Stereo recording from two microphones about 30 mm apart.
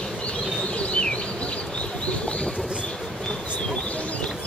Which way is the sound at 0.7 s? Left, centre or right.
Left.